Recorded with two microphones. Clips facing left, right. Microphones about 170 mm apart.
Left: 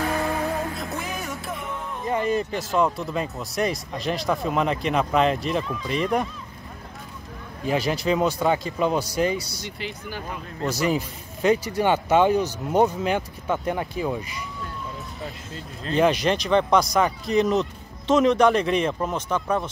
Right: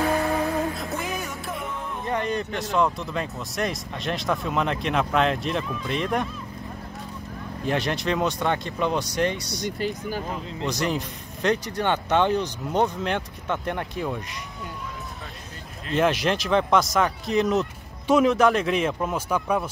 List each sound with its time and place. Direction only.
0.0 s music: 20° right (ahead or behind)
0.7 s music: centre (ahead or behind)
2.0 s speech: 5° left (ahead or behind)
7.6 s speech: centre (ahead or behind)
9.7 s speech: 45° right (ahead or behind)
10.7 s speech: 5° left (ahead or behind)
15.9 s speech: centre (ahead or behind)